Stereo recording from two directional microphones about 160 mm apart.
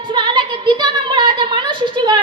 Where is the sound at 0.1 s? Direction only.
30° right (ahead or behind).